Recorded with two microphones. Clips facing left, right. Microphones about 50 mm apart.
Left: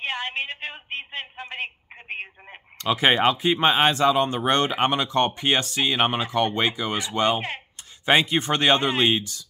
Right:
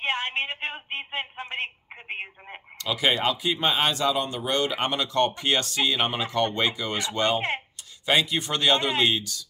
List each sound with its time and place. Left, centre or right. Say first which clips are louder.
0.0 s speech: right 1 dB; right
2.8 s speech: left 5 dB; left
4.4 s speech: left 4 dB; left
4.6 s speech: left 4 dB; left
8.0 s speech: left 3 dB; left